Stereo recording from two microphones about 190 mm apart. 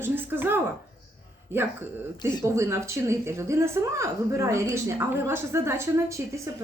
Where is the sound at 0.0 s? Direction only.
10° right (ahead or behind).